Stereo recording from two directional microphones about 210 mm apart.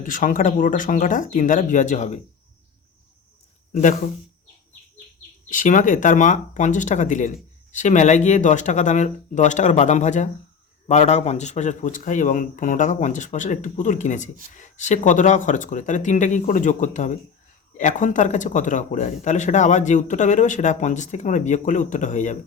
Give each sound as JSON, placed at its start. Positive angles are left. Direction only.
{"t": 0.0, "sound": "speech", "side_deg": 40}
{"t": 3.7, "sound": "speech", "side_deg": 35}
{"t": 5.5, "sound": "speech", "side_deg": 40}